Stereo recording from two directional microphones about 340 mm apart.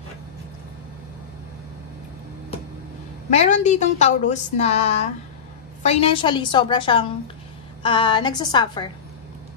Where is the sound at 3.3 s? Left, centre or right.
Centre.